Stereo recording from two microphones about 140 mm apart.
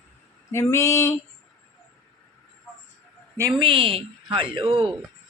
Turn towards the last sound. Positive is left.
turn(degrees=-40)  # may be behind; listen again after turning